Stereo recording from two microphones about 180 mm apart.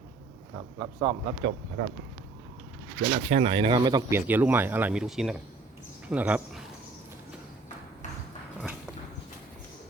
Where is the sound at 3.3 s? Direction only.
30° right (ahead or behind).